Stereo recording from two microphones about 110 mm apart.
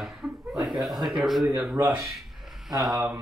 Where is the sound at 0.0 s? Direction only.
Centre (ahead or behind).